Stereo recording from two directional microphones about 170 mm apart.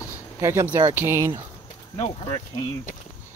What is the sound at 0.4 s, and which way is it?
Speech, 15° right (ahead or behind).